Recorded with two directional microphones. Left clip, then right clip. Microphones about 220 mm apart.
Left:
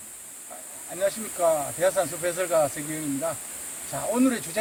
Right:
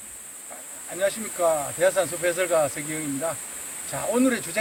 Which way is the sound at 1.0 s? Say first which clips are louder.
Right 1 dB; 10° right (ahead or behind).